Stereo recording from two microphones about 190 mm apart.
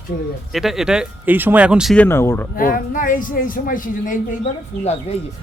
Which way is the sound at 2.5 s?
45° left (ahead or behind).